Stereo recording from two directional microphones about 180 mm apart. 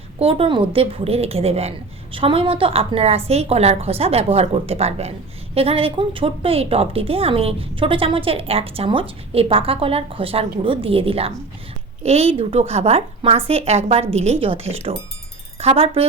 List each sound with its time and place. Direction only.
0.2 s a woman's voice: 30° right (ahead or behind)